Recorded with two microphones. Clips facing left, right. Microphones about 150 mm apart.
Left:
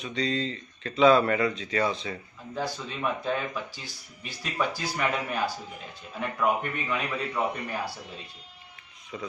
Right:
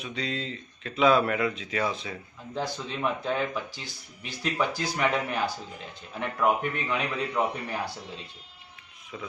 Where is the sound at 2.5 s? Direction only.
20° right (ahead or behind).